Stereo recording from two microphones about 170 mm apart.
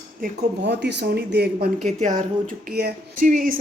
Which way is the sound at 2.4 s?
65° right (ahead or behind).